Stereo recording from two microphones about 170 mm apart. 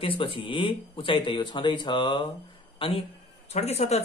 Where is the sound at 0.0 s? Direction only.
30° left (ahead or behind).